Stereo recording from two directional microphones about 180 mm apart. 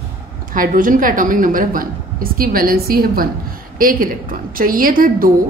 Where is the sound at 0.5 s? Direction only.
50° right (ahead or behind).